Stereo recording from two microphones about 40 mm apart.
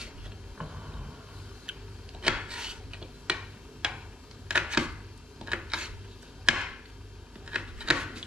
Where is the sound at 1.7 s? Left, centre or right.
Right.